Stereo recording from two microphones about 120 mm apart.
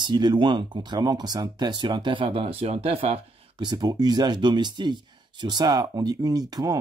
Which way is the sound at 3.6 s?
35° right (ahead or behind).